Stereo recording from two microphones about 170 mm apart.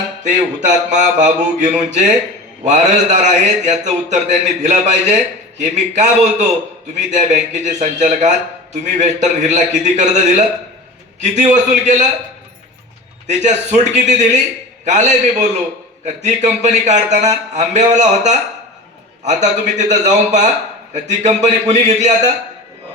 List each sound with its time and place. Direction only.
0.3 s speech: 45° right (ahead or behind)
13.2 s speech: 45° right (ahead or behind)